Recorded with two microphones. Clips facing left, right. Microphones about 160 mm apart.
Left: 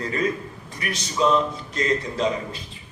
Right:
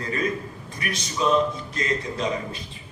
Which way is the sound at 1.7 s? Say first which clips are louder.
Left 3 dB; 30° left (ahead or behind).